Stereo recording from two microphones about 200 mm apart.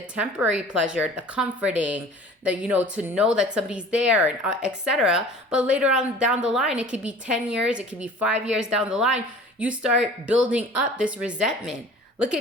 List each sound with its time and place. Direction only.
0.2 s a woman's voice: 5° right (ahead or behind)